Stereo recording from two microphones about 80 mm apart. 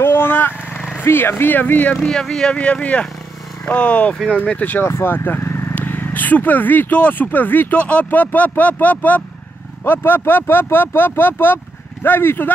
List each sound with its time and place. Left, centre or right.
0.0 s vehicle: left
0.9 s speech: left
2.0 s speech: centre; by 12.5 s left